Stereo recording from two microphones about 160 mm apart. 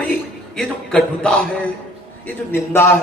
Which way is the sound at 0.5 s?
5° left (ahead or behind).